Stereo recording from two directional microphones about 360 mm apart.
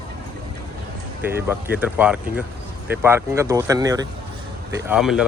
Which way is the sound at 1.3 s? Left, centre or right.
Centre.